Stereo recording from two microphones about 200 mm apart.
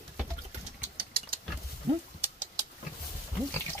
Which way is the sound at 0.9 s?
50° right (ahead or behind).